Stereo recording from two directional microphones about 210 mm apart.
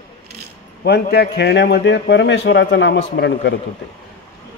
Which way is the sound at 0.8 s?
50° left (ahead or behind).